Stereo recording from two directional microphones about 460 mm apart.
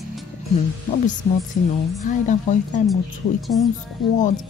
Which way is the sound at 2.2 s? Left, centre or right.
Centre.